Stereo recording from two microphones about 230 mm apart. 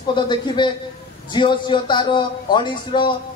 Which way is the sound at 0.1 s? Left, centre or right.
Centre.